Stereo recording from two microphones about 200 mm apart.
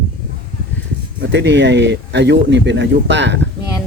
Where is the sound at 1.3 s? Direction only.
60° right (ahead or behind).